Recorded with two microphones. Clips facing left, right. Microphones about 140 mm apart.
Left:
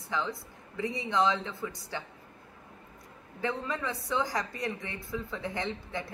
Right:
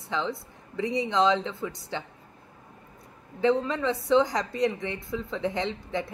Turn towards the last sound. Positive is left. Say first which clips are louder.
# right 5 dB
turn(degrees=-20)  # may be behind; listen again after turning